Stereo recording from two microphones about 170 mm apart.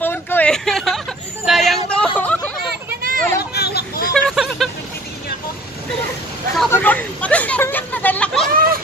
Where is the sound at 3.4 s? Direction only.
70° left (ahead or behind).